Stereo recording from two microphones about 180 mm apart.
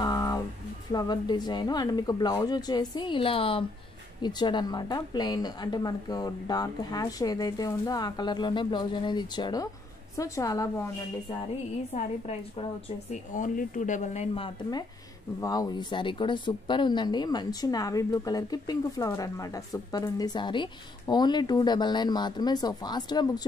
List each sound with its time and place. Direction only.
0.0 s a sound: 20° left (ahead or behind)
0.9 s a woman's voice: 20° left (ahead or behind)
11.9 s speech: 35° left (ahead or behind)
13.1 s speech: 45° left (ahead or behind); by 23.4 s 20° left (ahead or behind)